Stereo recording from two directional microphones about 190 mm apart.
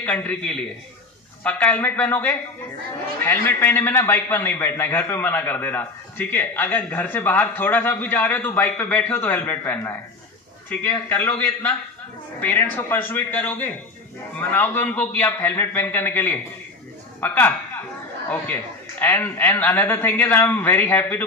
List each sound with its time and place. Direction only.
0.0 s a man's voice: 5° left (ahead or behind)